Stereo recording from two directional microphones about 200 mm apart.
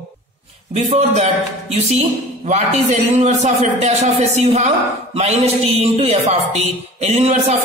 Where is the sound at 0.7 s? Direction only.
35° right (ahead or behind).